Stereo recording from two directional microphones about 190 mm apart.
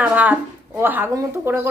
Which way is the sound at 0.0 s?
10° right (ahead or behind).